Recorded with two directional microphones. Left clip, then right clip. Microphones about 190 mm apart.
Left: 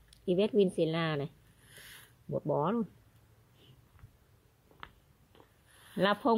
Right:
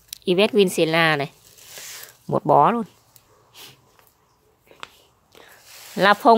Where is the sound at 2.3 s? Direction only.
35° right (ahead or behind).